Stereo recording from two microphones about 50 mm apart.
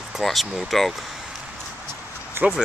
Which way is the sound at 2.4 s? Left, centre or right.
Right.